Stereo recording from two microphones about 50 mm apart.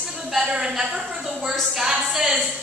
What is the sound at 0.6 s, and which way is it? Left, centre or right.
Speech, centre.